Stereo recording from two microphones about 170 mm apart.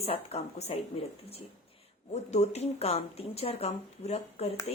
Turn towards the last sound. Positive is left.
turn(degrees=40)  # may be behind; listen again after turning